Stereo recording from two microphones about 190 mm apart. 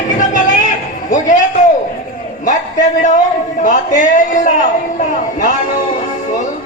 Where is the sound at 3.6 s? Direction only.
40° left (ahead or behind).